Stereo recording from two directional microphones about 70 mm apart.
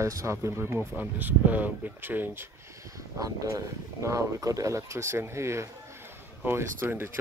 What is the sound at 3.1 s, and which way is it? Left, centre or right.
Speech, right.